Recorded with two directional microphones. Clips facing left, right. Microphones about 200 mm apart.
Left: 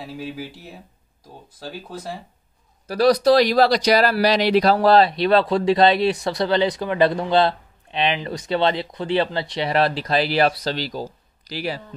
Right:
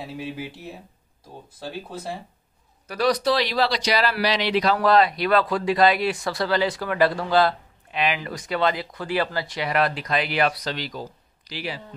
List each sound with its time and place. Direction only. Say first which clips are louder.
0.0 s speech: left 1 dB; centre (ahead or behind)
2.9 s speech: left 6 dB; 35° left (ahead or behind)